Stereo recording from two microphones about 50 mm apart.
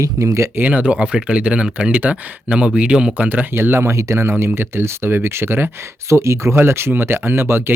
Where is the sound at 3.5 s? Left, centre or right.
Right.